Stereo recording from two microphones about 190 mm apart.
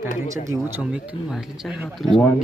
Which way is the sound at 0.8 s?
5° right (ahead or behind).